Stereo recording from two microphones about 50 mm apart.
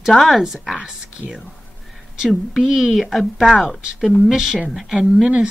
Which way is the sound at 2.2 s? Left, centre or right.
Centre.